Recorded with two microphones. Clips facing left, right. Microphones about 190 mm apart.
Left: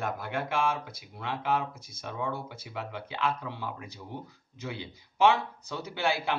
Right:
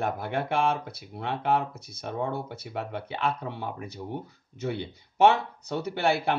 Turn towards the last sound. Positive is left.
turn(degrees=-60)  # may be behind; listen again after turning